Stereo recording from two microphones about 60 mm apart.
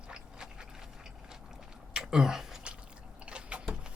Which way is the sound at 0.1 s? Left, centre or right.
Centre.